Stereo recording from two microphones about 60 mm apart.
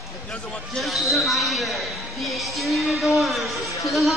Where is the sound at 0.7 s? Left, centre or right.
Centre.